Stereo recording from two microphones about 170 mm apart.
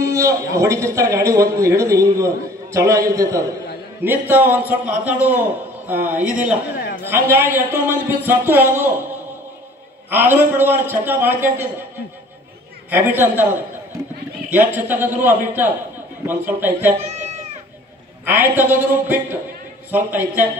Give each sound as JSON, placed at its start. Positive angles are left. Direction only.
{"t": 0.0, "sound": "a man's voice", "side_deg": -15}
{"t": 10.0, "sound": "a man's voice", "side_deg": -10}
{"t": 12.9, "sound": "a man's voice", "side_deg": -10}
{"t": 14.5, "sound": "a man's voice", "side_deg": -10}
{"t": 17.0, "sound": "a sound", "side_deg": -40}
{"t": 18.2, "sound": "a man's voice", "side_deg": -10}